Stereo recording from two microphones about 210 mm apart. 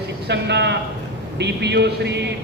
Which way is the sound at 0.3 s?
55° right (ahead or behind).